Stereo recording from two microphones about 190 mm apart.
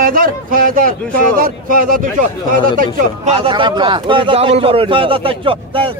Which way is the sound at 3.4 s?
25° right (ahead or behind).